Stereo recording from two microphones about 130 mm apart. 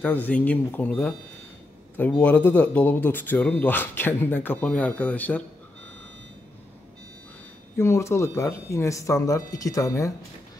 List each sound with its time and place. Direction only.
0.0 s speech: 15° left (ahead or behind)
7.7 s speech: 20° left (ahead or behind)